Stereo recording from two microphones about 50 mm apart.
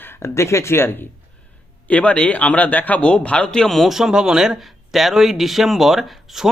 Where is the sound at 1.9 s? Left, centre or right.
Left.